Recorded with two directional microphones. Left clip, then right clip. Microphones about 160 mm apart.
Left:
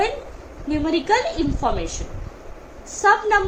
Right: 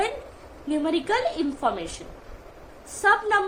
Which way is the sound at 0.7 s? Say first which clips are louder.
Left 5 dB; 25° right (ahead or behind).